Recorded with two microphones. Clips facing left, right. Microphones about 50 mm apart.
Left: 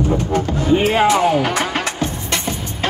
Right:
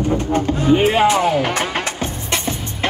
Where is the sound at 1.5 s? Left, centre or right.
Right.